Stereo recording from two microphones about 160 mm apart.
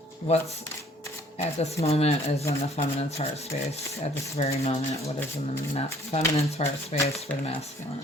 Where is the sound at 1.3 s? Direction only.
40° left (ahead or behind).